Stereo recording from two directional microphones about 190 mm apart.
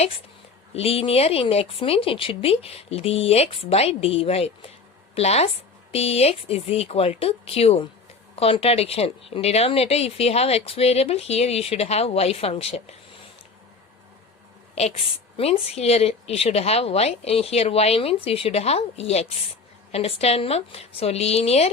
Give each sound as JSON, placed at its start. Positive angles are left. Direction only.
{"t": 0.7, "sound": "speech", "side_deg": 30}
{"t": 14.8, "sound": "speech", "side_deg": 35}